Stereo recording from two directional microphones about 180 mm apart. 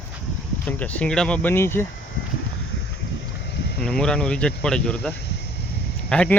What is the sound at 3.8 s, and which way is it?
Speech, 5° left (ahead or behind).